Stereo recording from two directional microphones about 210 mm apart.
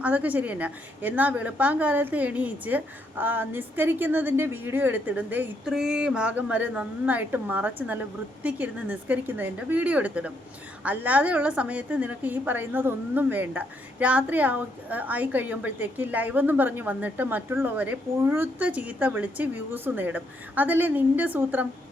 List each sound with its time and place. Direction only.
0.0 s a woman's voice: 5° right (ahead or behind)